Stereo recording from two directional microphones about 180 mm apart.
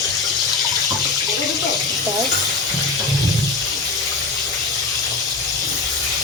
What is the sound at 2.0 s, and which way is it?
Frying, 20° right (ahead or behind).